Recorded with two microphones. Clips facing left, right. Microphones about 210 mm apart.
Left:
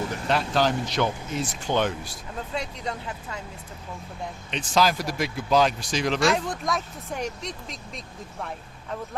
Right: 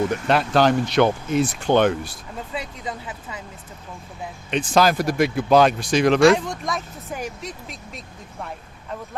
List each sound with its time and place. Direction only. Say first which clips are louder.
0.3 s speech: right 5 dB; 65° right (ahead or behind)
2.5 s speech: even; 5° right (ahead or behind)
4.5 s speech: right 5 dB; 55° right (ahead or behind)
6.1 s speech: right 8 dB; centre (ahead or behind)